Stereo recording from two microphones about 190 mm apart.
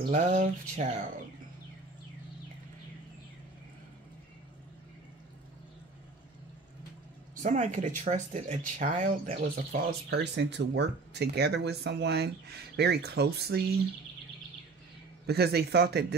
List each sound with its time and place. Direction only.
0.1 s speech: 40° right (ahead or behind)
7.4 s speech: 40° right (ahead or behind)
9.7 s speech: 60° right (ahead or behind)
15.2 s speech: 60° right (ahead or behind)